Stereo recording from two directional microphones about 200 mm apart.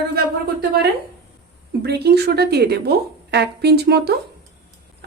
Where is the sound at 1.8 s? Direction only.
55° right (ahead or behind).